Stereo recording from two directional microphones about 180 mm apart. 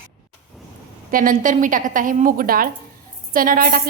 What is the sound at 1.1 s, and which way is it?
A woman's voice, 50° right (ahead or behind).